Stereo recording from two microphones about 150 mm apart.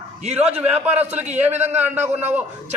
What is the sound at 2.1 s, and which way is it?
Speech, 45° right (ahead or behind).